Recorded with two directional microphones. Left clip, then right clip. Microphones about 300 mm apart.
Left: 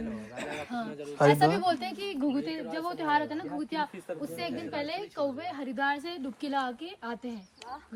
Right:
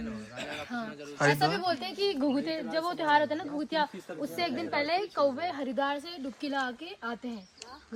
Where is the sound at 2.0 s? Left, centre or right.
Right.